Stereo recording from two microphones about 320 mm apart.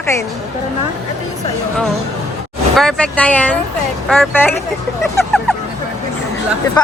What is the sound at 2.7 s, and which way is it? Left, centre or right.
A woman's voice, centre.